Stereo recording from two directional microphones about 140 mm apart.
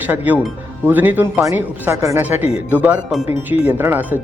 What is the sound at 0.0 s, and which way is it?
Speech, 10° right (ahead or behind).